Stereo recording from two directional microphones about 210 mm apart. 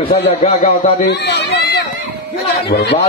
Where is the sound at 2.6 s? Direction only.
50° left (ahead or behind).